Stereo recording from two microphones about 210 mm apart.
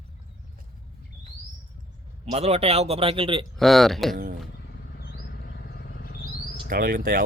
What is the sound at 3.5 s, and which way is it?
Speech, centre (ahead or behind).